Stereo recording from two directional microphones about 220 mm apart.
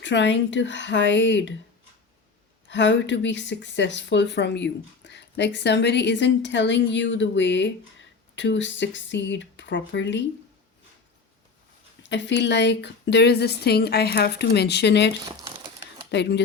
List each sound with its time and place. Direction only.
0.0 s speech: 55° left (ahead or behind)
2.6 s speech: 55° left (ahead or behind)
12.0 s a woman's voice: 55° left (ahead or behind)
15.2 s crumpling: 20° right (ahead or behind)
16.1 s a woman's voice: 50° left (ahead or behind)